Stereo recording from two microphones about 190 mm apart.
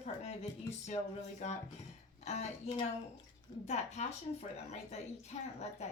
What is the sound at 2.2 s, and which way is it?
Speech, 35° left (ahead or behind).